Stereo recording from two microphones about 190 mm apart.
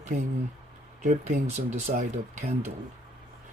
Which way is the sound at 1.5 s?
40° right (ahead or behind).